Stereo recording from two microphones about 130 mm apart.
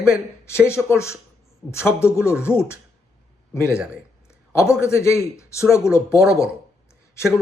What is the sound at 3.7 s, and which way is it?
Speech, 5° right (ahead or behind).